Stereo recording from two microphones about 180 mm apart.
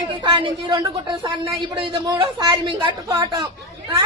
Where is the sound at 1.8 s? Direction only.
25° right (ahead or behind).